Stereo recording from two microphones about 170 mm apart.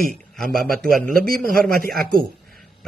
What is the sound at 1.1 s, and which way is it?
Speech, 60° right (ahead or behind).